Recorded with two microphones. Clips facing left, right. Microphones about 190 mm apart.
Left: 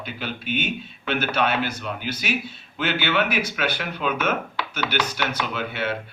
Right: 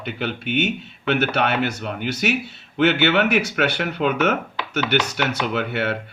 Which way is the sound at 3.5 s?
60° right (ahead or behind).